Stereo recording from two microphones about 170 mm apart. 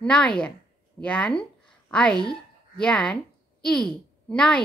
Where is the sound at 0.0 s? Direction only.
5° left (ahead or behind).